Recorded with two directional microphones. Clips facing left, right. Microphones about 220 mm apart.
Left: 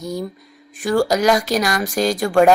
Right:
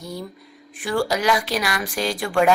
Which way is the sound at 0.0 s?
45° left (ahead or behind).